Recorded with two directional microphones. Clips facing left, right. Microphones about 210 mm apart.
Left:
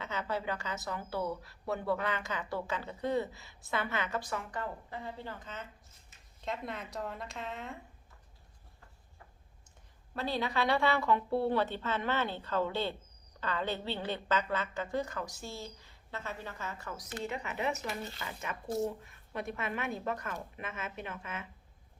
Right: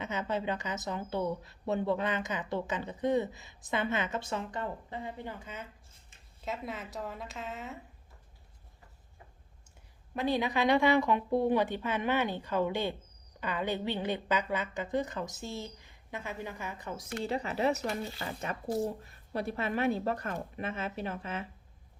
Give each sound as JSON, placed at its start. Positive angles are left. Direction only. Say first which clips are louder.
{"t": 0.0, "sound": "a woman's voice", "louder": "right 3 dB", "side_deg": -20}
{"t": 10.2, "sound": "speech", "louder": "right 4 dB", "side_deg": -15}
{"t": 17.2, "sound": "a woman's voice", "louder": "right 5 dB", "side_deg": -35}